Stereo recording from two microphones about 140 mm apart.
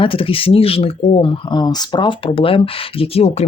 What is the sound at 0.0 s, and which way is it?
Speech, 40° left (ahead or behind).